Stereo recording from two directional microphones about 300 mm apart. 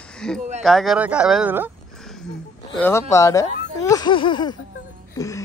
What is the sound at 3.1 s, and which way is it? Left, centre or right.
Speech, centre.